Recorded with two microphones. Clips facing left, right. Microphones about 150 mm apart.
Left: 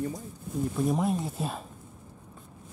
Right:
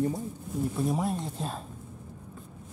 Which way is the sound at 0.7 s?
Centre (ahead or behind).